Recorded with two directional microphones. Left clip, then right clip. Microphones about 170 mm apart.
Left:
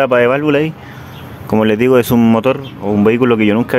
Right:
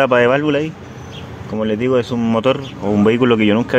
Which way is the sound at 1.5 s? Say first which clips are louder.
Left 6 dB; 40° left (ahead or behind).